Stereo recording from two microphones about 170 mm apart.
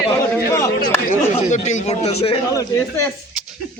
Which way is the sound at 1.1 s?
45° left (ahead or behind).